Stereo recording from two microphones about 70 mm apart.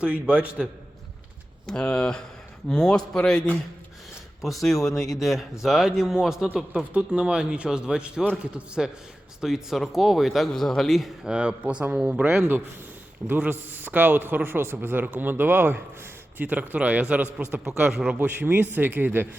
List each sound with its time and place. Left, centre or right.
0.0 s speech: centre
1.6 s speech: centre
4.4 s a man's voice: centre
11.3 s speech: centre
13.2 s a man's voice: right
16.4 s a man's voice: right
18.2 s a man's voice: right